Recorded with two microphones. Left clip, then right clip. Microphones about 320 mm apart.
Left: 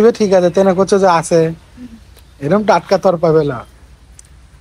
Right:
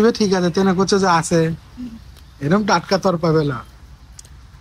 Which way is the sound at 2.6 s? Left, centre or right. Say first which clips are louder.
Left 6 dB; centre.